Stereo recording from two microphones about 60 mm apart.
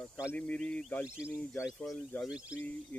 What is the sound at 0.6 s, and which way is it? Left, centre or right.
Speech, centre.